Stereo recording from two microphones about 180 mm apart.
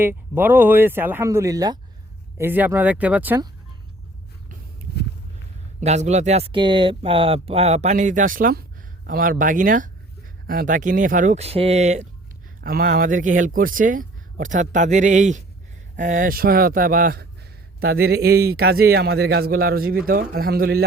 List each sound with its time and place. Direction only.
0.0 s speech: 10° right (ahead or behind)
5.8 s speech: 40° right (ahead or behind)
12.6 s a man's voice: 50° right (ahead or behind)